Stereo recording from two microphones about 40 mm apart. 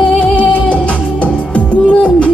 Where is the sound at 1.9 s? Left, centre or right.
Left.